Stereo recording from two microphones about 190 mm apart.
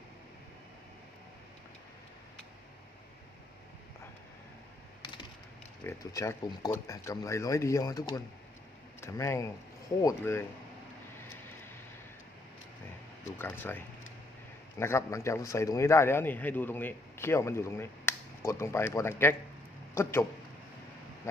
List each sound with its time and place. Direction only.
5.8 s a man's voice: 15° left (ahead or behind)
13.4 s a man's voice: 10° left (ahead or behind)